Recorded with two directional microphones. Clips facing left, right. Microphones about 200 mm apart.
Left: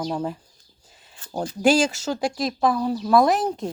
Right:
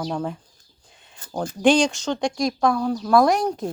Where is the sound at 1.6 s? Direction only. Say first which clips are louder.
Right 1 dB; 5° left (ahead or behind).